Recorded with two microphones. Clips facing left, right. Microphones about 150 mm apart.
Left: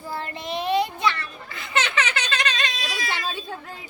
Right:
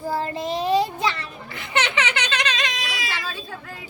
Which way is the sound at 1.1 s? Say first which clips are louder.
Right 1 dB; 25° right (ahead or behind).